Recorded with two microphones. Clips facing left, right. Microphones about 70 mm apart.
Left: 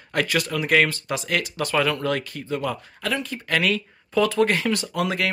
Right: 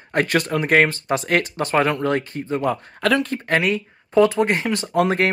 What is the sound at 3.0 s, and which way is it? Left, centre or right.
Speech, right.